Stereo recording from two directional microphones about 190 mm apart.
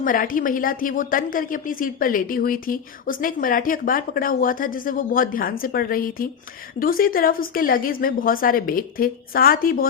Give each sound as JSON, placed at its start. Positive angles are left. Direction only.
{"t": 0.0, "sound": "a woman's voice", "side_deg": 45}